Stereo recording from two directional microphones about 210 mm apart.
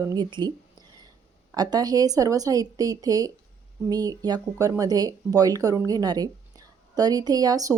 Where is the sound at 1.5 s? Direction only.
20° right (ahead or behind).